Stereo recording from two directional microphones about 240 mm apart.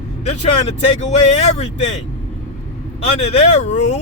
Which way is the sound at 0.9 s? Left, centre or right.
Left.